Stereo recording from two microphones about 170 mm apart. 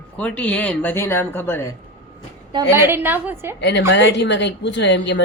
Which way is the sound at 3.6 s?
90° left.